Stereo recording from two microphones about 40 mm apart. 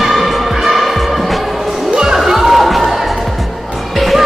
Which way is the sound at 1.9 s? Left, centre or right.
Centre.